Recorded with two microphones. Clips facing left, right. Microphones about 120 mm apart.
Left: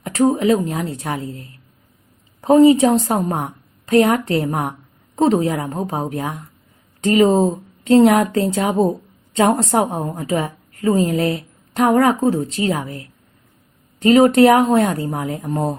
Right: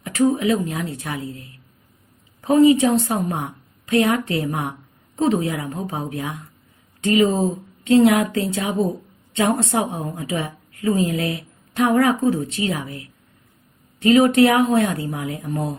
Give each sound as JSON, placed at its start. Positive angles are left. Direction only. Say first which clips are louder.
{"t": 0.0, "sound": "a woman's voice", "louder": "left 3 dB", "side_deg": 40}